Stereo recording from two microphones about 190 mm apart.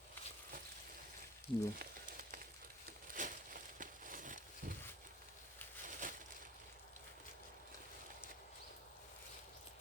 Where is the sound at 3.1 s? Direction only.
45° right (ahead or behind).